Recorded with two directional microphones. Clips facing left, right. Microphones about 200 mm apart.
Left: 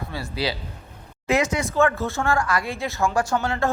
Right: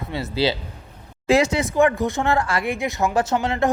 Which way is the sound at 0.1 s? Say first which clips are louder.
Right 7 dB; 25° right (ahead or behind).